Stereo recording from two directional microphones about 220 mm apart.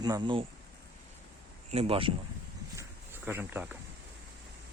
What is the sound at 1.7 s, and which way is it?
Speech, 25° right (ahead or behind).